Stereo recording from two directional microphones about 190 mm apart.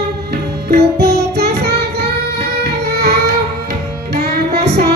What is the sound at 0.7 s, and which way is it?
Music, 55° right (ahead or behind).